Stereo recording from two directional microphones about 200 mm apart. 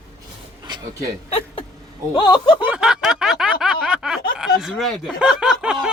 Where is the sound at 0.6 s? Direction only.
20° right (ahead or behind).